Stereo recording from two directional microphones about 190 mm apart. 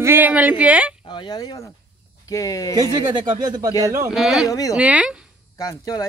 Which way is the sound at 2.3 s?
20° left (ahead or behind).